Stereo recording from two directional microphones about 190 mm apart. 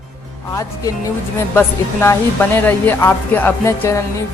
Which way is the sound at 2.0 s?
10° left (ahead or behind).